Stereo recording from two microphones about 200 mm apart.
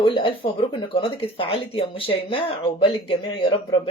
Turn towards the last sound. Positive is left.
turn(degrees=25)  # may be behind; listen again after turning